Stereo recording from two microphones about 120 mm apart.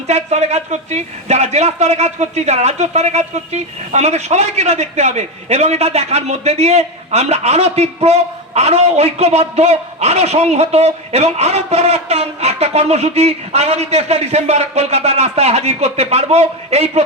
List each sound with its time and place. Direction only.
0.1 s a man's voice: 70° right (ahead or behind)